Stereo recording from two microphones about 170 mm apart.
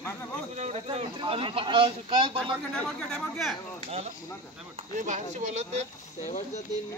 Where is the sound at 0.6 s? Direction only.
40° right (ahead or behind).